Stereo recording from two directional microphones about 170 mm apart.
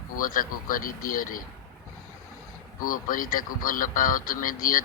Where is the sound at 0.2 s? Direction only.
55° left (ahead or behind).